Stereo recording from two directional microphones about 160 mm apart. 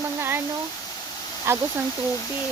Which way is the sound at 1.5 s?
15° right (ahead or behind).